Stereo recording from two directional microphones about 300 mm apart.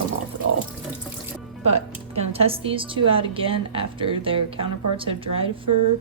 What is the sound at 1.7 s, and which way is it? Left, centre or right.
A woman's voice, centre.